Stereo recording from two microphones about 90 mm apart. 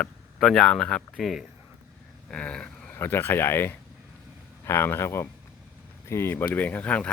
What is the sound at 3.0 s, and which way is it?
Speech, 25° left (ahead or behind).